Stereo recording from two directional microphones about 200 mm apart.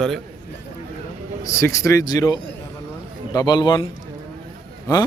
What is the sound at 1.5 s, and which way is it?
A man's voice, 15° left (ahead or behind).